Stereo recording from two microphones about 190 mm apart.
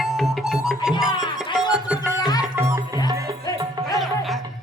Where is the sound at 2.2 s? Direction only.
20° left (ahead or behind).